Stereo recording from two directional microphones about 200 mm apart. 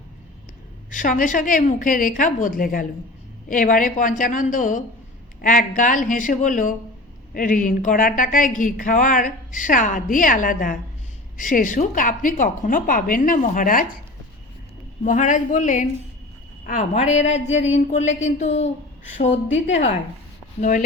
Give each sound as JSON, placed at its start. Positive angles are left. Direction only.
{"t": 0.9, "sound": "a woman's voice", "side_deg": 40}
{"t": 15.0, "sound": "speech", "side_deg": 40}